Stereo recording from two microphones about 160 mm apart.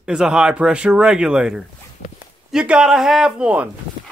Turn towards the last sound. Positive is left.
turn(degrees=-5)  # may be behind; listen again after turning